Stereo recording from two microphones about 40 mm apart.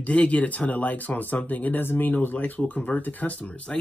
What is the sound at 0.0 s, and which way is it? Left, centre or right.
Speech, left.